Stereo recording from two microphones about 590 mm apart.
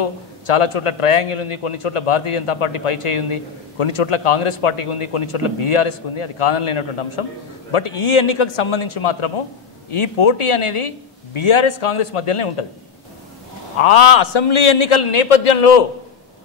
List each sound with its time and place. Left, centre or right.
0.5 s a man's voice: left
13.7 s a man's voice: left